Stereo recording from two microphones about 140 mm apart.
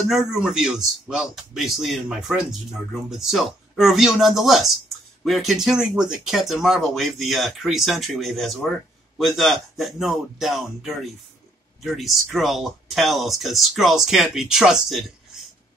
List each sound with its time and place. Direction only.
0.1 s speech: 5° right (ahead or behind)